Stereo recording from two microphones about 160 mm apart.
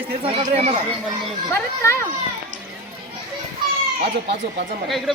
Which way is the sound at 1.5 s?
15° left (ahead or behind).